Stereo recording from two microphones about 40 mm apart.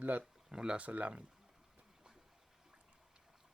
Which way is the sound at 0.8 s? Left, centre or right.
Right.